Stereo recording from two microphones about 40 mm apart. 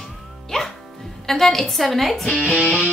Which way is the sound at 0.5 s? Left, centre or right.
Centre.